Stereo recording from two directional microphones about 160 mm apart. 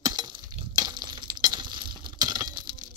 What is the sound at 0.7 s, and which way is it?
Chink, 25° right (ahead or behind).